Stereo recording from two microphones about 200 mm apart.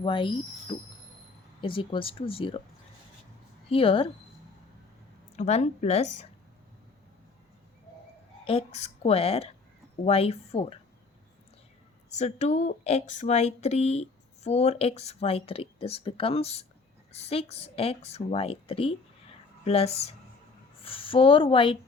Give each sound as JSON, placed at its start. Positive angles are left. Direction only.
{"t": 0.0, "sound": "a woman's voice", "side_deg": 25}
{"t": 1.6, "sound": "a woman's voice", "side_deg": 25}
{"t": 3.7, "sound": "a woman's voice", "side_deg": 30}
{"t": 5.4, "sound": "speech", "side_deg": 35}
{"t": 8.4, "sound": "a woman's voice", "side_deg": 30}
{"t": 12.0, "sound": "a woman's voice", "side_deg": 35}